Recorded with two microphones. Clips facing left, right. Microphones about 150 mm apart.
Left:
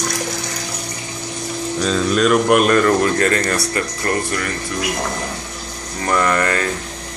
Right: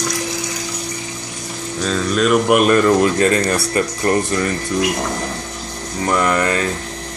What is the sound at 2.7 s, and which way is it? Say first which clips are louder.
Speech: right 1 dB; 20° right (ahead or behind).